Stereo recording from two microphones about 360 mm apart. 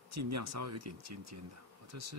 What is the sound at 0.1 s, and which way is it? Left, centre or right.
Speech, right.